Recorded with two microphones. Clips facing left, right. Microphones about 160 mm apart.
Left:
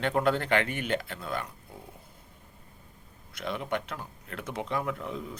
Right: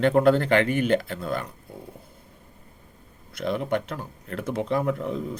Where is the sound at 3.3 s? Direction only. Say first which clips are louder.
Right 7 dB; 40° right (ahead or behind).